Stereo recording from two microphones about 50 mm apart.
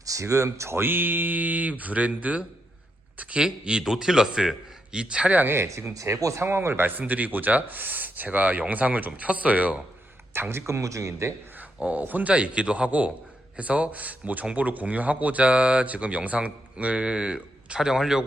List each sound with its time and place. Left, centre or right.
0.2 s speech: right
0.8 s speech: right
3.2 s a sound: right
3.4 s a man's voice: centre
5.5 s speech: right
6.4 s speech: right
7.0 s speech: right
10.5 s speech: right
11.8 s speech: right
12.3 s speech: right